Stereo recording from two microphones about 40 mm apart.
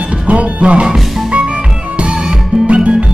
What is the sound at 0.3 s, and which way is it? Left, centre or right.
Music, right.